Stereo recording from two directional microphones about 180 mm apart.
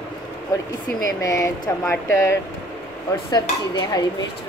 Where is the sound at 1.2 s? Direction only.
15° left (ahead or behind).